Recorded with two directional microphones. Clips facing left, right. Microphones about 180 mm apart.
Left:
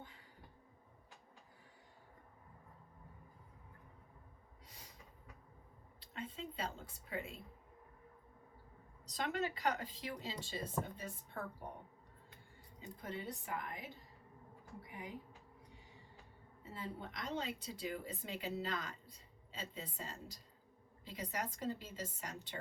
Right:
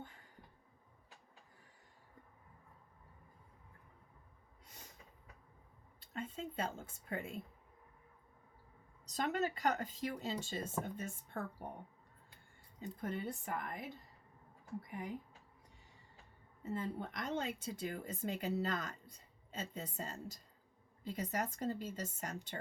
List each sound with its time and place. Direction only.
6.0 s a sound: 45° right (ahead or behind)
9.0 s speech: 45° right (ahead or behind)
12.8 s speech: 50° right (ahead or behind)
16.6 s speech: 45° right (ahead or behind)